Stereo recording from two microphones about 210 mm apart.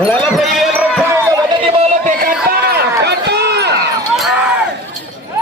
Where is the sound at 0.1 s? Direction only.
5° left (ahead or behind).